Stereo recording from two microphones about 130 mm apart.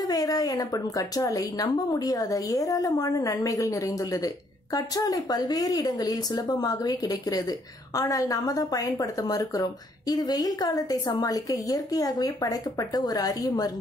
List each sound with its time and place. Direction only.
0.0 s speech: 30° left (ahead or behind)